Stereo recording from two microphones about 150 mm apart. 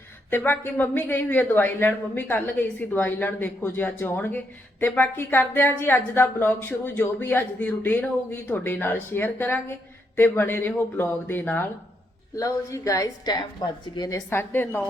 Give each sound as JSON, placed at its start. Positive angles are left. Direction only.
{"t": 0.3, "sound": "a woman's voice", "side_deg": 15}